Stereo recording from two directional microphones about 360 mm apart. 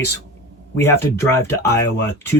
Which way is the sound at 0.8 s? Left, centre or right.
Centre.